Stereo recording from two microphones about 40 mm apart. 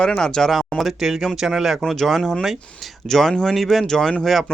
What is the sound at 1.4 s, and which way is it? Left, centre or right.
Speech, centre.